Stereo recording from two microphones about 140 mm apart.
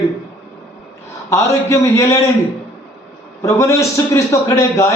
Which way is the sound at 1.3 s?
20° left (ahead or behind).